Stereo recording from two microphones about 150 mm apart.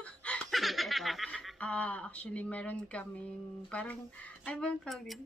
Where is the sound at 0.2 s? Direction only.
5° left (ahead or behind).